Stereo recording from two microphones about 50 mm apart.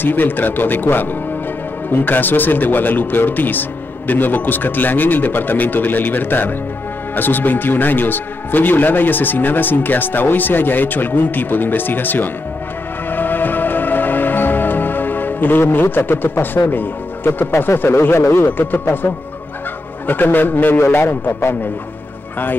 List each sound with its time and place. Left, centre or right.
0.0 s a man's voice: left
13.1 s music: left
18.4 s a man's voice: left